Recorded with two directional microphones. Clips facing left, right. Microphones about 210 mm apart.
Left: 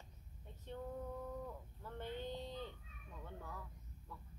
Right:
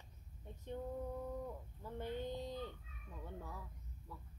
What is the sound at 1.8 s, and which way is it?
Speech, 15° right (ahead or behind).